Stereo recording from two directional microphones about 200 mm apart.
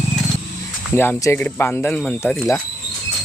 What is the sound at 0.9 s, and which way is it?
Speech, 10° left (ahead or behind).